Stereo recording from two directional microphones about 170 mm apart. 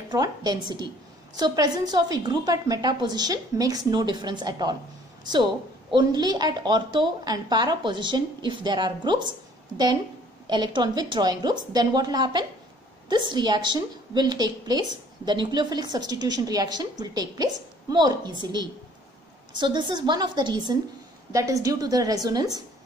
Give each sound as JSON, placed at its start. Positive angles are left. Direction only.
{"t": 0.1, "sound": "a woman's voice", "side_deg": -20}
{"t": 10.4, "sound": "a woman's voice", "side_deg": -25}